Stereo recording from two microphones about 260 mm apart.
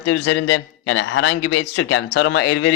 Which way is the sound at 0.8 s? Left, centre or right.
Left.